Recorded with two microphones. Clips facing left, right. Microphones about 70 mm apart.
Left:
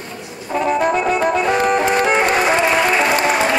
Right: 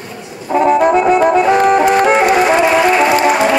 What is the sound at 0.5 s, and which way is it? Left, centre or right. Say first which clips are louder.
Brass instrument: right 7 dB; centre.